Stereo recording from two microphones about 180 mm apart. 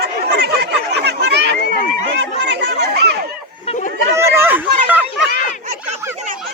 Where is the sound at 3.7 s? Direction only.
45° left (ahead or behind).